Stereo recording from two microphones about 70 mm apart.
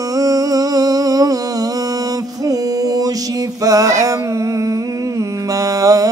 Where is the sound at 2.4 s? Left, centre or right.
Right.